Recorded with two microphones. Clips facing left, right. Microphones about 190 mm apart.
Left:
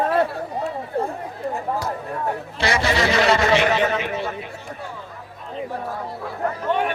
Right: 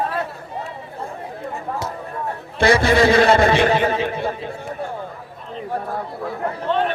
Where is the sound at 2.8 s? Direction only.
55° right (ahead or behind).